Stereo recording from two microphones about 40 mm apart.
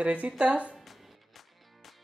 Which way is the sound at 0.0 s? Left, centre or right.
Right.